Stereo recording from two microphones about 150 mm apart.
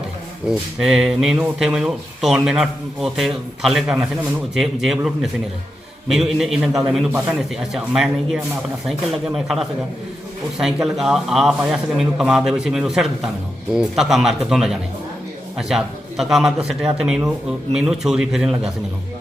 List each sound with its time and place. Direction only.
0.8 s speech: 5° right (ahead or behind)